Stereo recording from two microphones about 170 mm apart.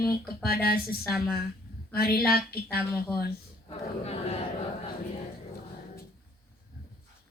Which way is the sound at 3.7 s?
35° left (ahead or behind).